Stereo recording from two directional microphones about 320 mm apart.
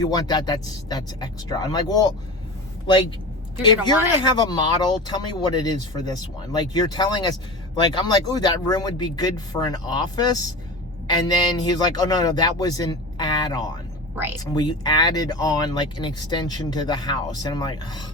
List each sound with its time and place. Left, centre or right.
0.0 s speech: centre
4.2 s speech: centre